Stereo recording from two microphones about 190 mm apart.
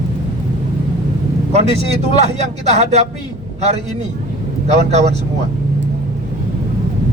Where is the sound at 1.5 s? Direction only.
35° right (ahead or behind).